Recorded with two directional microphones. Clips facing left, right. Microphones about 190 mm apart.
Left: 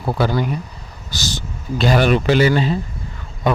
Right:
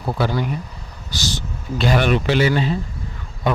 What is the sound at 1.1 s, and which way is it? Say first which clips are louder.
Speech: even; 45° left (ahead or behind).